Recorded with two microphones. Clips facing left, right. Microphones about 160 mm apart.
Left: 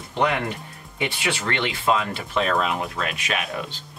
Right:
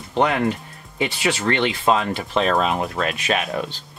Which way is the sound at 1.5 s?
35° right (ahead or behind).